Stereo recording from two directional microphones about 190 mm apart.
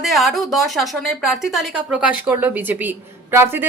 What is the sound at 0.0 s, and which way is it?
A woman's voice, centre (ahead or behind).